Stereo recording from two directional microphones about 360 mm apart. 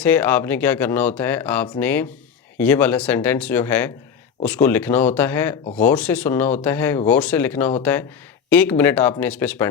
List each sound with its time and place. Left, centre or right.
0.0 s speech: centre